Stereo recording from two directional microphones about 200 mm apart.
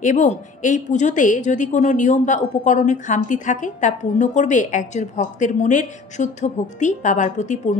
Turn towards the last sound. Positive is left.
turn(degrees=35)  # may be behind; listen again after turning